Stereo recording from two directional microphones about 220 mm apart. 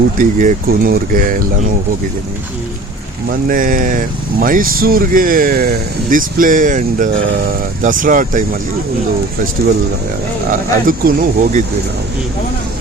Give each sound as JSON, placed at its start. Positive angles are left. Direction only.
{"t": 0.2, "sound": "speech", "side_deg": -35}
{"t": 3.2, "sound": "speech", "side_deg": -40}
{"t": 10.5, "sound": "speech", "side_deg": -40}